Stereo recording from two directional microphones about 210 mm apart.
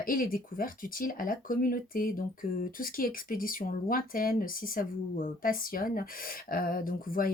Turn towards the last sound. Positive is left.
turn(degrees=40)  # may be behind; listen again after turning